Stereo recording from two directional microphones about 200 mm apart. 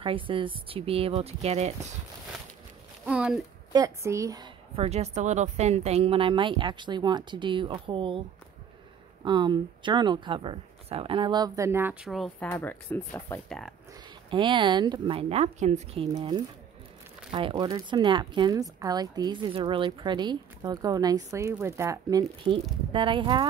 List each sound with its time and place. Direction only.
0.0 s speech: 25° right (ahead or behind)
3.1 s a sound: 5° right (ahead or behind)
3.7 s a woman's voice: 15° right (ahead or behind)
4.7 s speech: 35° right (ahead or behind)
9.2 s speech: 20° right (ahead or behind); by 13.7 s centre (ahead or behind)
14.3 s speech: 25° right (ahead or behind)
16.2 s speech: 20° right (ahead or behind)